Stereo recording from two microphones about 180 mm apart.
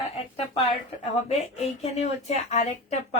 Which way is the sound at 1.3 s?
35° left (ahead or behind).